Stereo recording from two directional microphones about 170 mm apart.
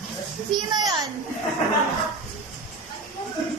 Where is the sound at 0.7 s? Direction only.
25° right (ahead or behind).